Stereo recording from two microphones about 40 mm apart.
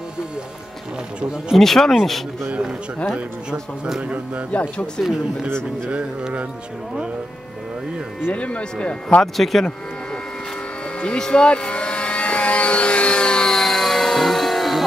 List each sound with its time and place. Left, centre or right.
1.6 s speech: centre
4.5 s speech: left
8.3 s speech: left
9.2 s speech: centre
11.0 s speech: left
11.2 s vehicle: left; by 14.8 s centre